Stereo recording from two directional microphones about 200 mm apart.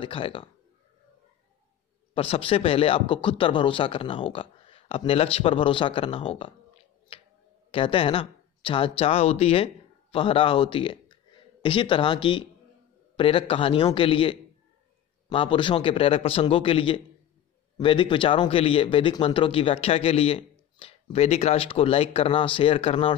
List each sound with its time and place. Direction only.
0.0 s speech: 25° left (ahead or behind)
2.1 s speech: 30° left (ahead or behind)
7.1 s a sound: 25° left (ahead or behind)
7.7 s speech: 25° left (ahead or behind)